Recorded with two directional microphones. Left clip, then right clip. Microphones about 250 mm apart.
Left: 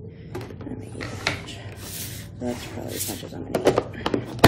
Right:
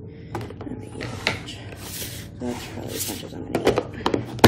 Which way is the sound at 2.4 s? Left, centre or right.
Centre.